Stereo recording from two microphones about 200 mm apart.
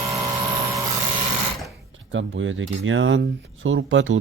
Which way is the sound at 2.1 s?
70° right (ahead or behind).